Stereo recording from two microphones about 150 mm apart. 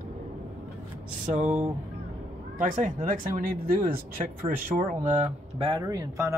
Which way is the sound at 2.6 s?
60° right (ahead or behind).